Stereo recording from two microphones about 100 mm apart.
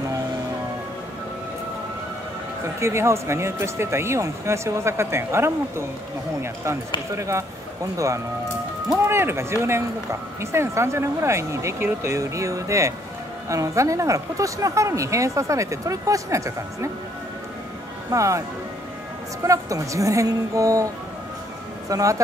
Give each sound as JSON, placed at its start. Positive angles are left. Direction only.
{"t": 2.6, "sound": "speech", "side_deg": -25}
{"t": 18.1, "sound": "speech", "side_deg": -30}
{"t": 19.4, "sound": "speech", "side_deg": -35}